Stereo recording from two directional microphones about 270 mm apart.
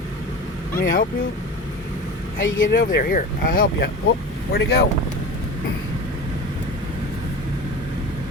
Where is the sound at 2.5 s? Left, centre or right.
Left.